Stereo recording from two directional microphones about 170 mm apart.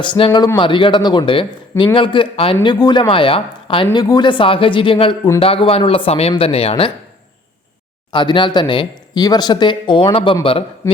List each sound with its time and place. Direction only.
0.0 s a man's voice: 30° left (ahead or behind)
8.1 s a man's voice: 25° left (ahead or behind)